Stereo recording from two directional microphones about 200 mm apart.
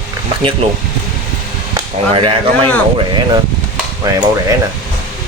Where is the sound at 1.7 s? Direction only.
25° right (ahead or behind).